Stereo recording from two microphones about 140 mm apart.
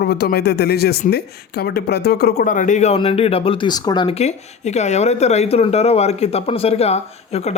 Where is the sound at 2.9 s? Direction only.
40° left (ahead or behind).